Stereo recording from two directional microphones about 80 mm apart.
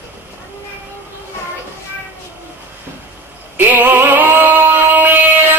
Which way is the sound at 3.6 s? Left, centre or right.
Right.